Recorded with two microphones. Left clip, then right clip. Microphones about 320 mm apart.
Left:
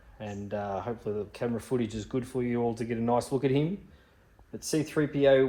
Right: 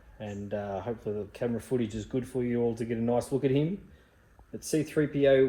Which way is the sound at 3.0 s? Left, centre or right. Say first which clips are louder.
Left 1 dB; left.